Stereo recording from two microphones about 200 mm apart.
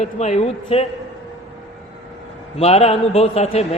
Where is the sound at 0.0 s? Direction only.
35° left (ahead or behind).